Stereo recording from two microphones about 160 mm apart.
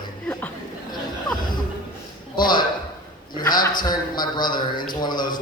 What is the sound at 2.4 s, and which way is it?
A man's voice, 30° left (ahead or behind).